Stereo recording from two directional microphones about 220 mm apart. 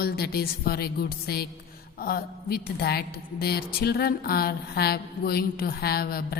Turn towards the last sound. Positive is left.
turn(degrees=45)  # may be behind; listen again after turning